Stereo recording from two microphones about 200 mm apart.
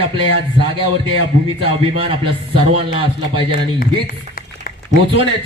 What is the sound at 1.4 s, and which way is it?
A man's voice, 25° right (ahead or behind).